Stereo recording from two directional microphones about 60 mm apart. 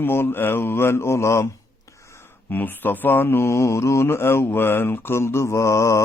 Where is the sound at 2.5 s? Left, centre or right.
Left.